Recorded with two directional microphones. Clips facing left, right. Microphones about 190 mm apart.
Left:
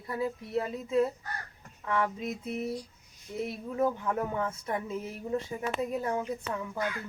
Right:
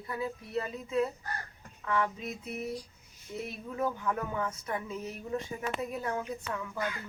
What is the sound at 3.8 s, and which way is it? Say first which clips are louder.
Speech: left 3 dB; 20° left (ahead or behind).